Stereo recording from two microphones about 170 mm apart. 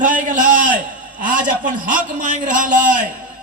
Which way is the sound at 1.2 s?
50° right (ahead or behind).